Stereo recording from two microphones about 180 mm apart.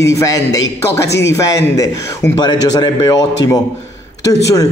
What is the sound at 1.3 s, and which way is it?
A man's voice, 20° left (ahead or behind).